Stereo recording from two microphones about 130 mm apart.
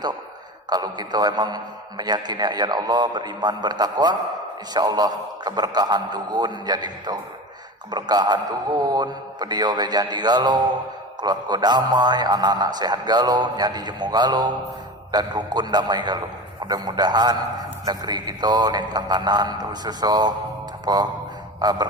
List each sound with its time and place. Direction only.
0.7 s a man's voice: 30° right (ahead or behind)